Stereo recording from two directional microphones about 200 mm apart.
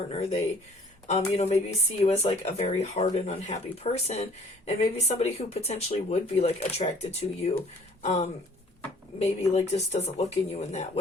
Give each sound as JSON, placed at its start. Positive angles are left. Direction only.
{"t": 0.1, "sound": "speech", "side_deg": 30}